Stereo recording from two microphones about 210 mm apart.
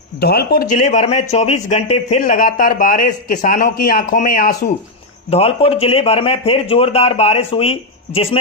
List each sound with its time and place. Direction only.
0.2 s speech: 50° left (ahead or behind)
5.3 s a man's voice: 30° left (ahead or behind)